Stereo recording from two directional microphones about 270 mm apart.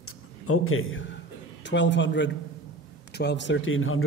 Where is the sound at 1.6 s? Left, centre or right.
Left.